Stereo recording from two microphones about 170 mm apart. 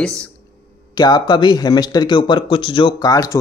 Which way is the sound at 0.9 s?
25° left (ahead or behind).